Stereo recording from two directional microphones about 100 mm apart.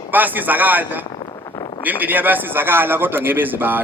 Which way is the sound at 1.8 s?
20° right (ahead or behind).